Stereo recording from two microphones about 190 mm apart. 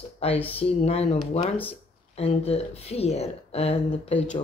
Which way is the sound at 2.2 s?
30° left (ahead or behind).